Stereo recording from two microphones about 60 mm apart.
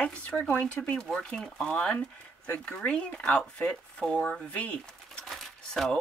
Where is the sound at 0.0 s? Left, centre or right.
Centre.